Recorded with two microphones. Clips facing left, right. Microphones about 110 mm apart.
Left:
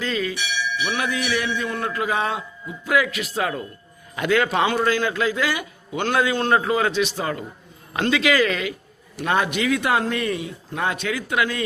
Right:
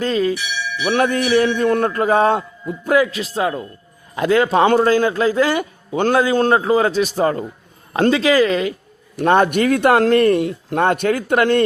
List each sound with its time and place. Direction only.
0.0 s a man's voice: 40° right (ahead or behind)
0.9 s a man's voice: 50° right (ahead or behind)
1.5 s a man's voice: 55° right (ahead or behind); by 8.7 s 30° right (ahead or behind)
9.1 s speech: 45° right (ahead or behind); by 10.8 s 70° right (ahead or behind)
10.8 s a man's voice: 50° right (ahead or behind)